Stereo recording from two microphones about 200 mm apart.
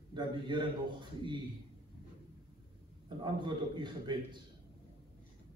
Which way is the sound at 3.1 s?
25° right (ahead or behind).